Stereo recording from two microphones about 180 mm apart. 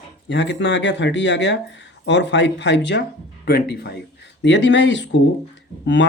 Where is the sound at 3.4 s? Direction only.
60° left (ahead or behind).